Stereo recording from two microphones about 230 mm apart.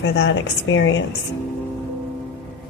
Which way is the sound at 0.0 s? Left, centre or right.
Left.